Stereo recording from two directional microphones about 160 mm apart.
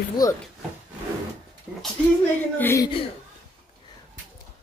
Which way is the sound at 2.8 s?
35° left (ahead or behind).